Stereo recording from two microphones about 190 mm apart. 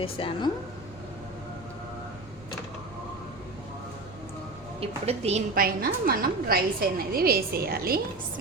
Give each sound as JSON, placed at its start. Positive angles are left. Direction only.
{"t": 0.0, "sound": "speech", "side_deg": 30}
{"t": 4.8, "sound": "a woman's voice", "side_deg": -35}
{"t": 5.5, "sound": "a woman's voice", "side_deg": -50}